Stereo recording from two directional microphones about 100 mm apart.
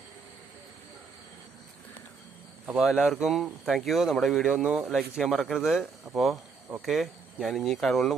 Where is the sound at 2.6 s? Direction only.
Centre (ahead or behind).